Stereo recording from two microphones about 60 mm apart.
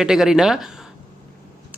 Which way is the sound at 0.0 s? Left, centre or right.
Centre.